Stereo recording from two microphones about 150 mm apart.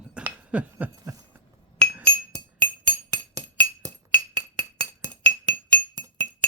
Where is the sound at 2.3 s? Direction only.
25° right (ahead or behind).